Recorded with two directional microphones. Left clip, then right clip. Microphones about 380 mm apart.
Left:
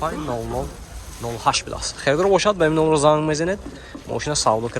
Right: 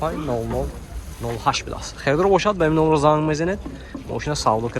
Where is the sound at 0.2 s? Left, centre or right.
Left.